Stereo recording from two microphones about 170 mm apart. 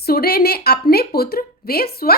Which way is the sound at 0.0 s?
65° left (ahead or behind).